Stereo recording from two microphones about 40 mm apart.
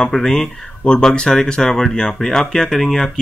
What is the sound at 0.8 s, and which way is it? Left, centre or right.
Speech, left.